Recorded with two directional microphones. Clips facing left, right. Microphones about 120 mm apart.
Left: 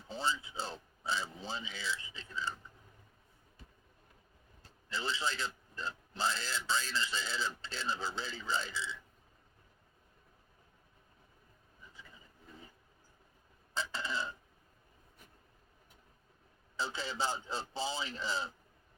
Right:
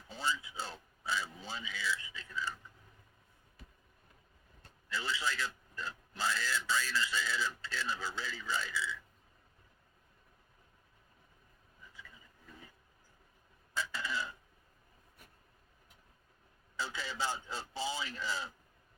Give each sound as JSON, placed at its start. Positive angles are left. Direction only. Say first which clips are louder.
{"t": 0.1, "sound": "speech", "louder": "left 1 dB", "side_deg": 30}
{"t": 4.9, "sound": "speech", "louder": "even", "side_deg": 25}
{"t": 13.7, "sound": "a sound", "louder": "even", "side_deg": 25}
{"t": 16.7, "sound": "speech", "louder": "left 2 dB", "side_deg": 30}